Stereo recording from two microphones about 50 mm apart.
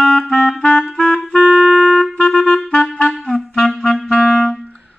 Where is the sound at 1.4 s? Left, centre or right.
Right.